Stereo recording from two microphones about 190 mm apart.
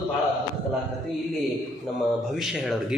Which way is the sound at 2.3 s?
Centre (ahead or behind).